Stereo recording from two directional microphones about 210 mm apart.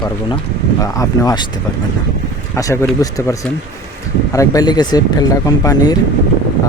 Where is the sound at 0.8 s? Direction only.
15° left (ahead or behind).